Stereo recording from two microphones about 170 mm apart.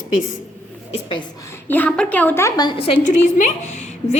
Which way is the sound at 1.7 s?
10° left (ahead or behind).